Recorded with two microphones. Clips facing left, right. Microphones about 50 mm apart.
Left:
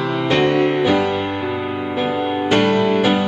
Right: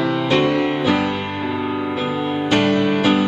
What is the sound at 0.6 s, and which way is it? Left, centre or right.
Music, left.